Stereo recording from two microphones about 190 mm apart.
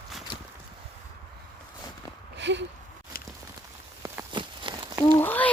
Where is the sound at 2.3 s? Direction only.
70° right (ahead or behind).